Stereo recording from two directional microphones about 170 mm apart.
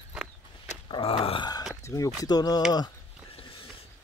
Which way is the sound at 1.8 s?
15° left (ahead or behind).